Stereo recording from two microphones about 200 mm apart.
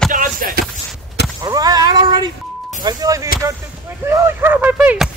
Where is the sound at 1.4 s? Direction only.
20° right (ahead or behind).